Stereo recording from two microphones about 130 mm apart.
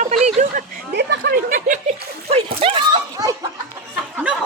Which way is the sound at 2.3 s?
45° right (ahead or behind).